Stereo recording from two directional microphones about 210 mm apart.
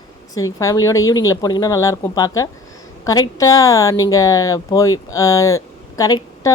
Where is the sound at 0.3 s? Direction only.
15° left (ahead or behind).